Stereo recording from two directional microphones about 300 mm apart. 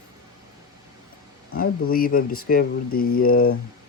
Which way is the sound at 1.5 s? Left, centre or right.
Left.